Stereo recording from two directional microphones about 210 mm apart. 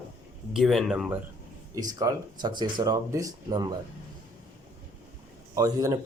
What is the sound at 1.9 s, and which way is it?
Speech, 20° right (ahead or behind).